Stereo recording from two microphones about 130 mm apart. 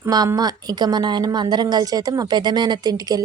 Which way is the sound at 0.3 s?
30° right (ahead or behind).